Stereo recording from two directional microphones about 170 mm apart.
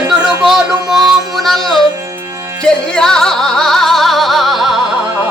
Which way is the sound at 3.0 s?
5° left (ahead or behind).